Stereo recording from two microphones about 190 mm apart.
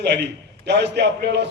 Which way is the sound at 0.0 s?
65° right (ahead or behind).